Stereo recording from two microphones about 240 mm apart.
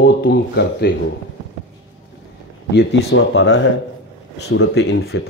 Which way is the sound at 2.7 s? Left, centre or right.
Left.